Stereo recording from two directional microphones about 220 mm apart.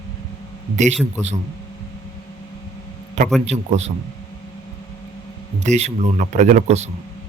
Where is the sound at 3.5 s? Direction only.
30° right (ahead or behind).